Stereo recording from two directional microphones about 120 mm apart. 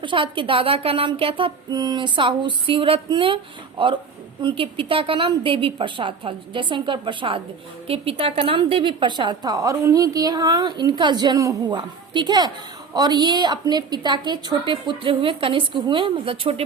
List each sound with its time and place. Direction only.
0.0 s a woman's voice: 45° right (ahead or behind)